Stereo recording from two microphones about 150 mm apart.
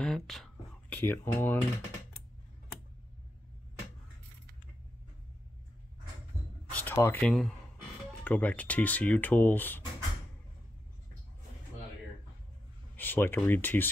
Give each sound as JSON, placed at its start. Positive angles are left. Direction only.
{"t": 0.0, "sound": "speech", "side_deg": 5}
{"t": 6.7, "sound": "a sound", "side_deg": 10}
{"t": 7.2, "sound": "speech", "side_deg": 5}
{"t": 12.9, "sound": "speech", "side_deg": 15}